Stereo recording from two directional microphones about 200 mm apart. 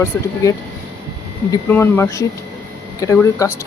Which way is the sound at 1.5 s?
10° left (ahead or behind).